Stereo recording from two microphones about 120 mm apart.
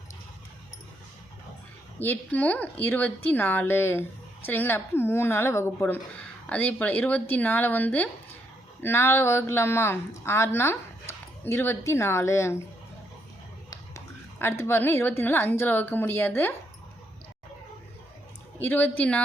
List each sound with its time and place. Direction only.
2.0 s a woman's voice: 15° left (ahead or behind)
13.7 s a woman's voice: 20° left (ahead or behind)
18.6 s speech: 15° left (ahead or behind)